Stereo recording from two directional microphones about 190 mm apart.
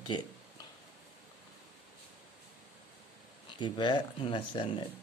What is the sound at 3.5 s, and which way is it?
Speech, 25° left (ahead or behind).